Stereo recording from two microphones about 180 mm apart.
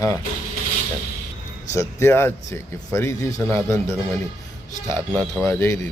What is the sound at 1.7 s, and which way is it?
A man's voice, 15° left (ahead or behind).